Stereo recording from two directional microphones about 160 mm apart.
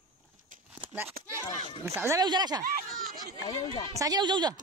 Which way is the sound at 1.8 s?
15° right (ahead or behind).